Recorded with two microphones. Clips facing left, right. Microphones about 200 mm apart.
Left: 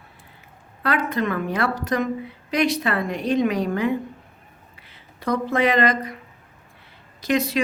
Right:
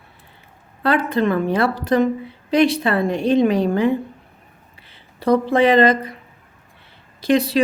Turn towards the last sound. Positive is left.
turn(degrees=-30)  # may be behind; listen again after turning